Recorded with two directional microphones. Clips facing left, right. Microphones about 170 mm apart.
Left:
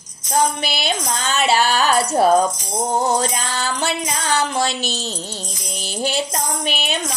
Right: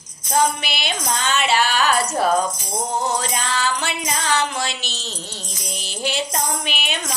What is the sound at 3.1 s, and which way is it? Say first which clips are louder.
Music: left 3 dB; 35° left (ahead or behind).